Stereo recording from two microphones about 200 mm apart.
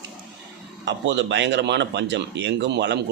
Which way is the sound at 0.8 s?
60° right (ahead or behind).